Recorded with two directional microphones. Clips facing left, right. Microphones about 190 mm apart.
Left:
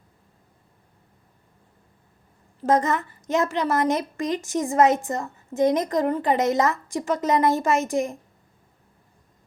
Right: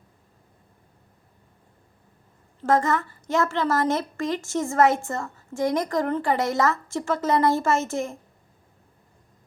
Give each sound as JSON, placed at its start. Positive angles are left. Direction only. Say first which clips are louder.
{"t": 2.6, "sound": "a woman's voice", "louder": "left 1 dB", "side_deg": 20}